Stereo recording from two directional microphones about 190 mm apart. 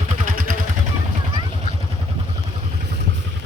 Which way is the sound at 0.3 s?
45° right (ahead or behind).